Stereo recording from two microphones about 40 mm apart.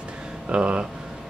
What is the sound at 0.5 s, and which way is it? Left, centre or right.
Speech, right.